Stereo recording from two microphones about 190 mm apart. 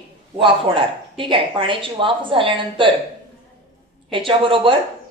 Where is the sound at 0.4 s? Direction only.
25° right (ahead or behind).